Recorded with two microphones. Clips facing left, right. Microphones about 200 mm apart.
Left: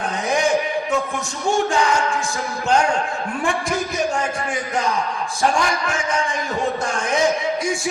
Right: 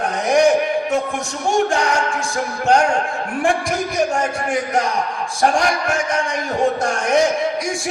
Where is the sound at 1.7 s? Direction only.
45° right (ahead or behind).